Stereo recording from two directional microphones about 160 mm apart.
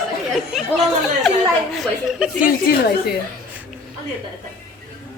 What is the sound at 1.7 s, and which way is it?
Speech, 5° right (ahead or behind).